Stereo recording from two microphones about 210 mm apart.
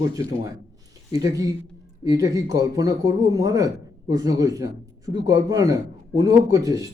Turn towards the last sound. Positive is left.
turn(degrees=-15)  # may be behind; listen again after turning